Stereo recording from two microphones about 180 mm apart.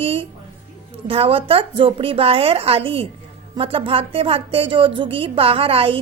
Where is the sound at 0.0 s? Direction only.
30° right (ahead or behind).